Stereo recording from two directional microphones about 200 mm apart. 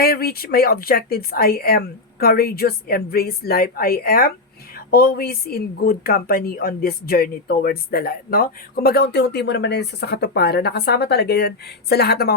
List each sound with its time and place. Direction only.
0.0 s speech: 50° left (ahead or behind)